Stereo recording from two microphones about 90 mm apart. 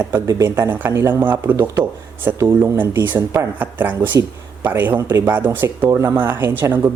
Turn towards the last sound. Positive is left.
turn(degrees=-25)  # may be behind; listen again after turning